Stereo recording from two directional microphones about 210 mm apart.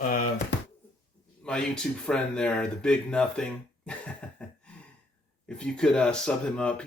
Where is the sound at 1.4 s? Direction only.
5° left (ahead or behind).